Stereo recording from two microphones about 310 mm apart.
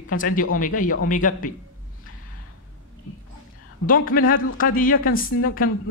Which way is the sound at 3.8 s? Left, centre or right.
Left.